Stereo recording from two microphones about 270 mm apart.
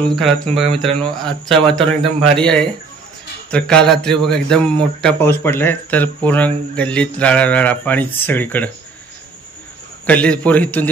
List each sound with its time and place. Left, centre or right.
0.0 s a man's voice: centre
10.0 s a man's voice: centre